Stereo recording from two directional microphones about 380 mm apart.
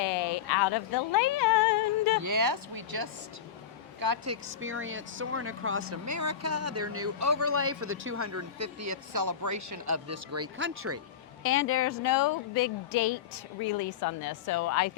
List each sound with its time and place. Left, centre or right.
0.0 s a sound: left
2.2 s speech: right
4.3 s speech: right
6.1 s speech: right
11.4 s speech: left
12.0 s a woman's voice: left